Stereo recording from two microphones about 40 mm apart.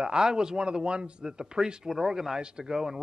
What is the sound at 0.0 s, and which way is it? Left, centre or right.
A man's voice, centre.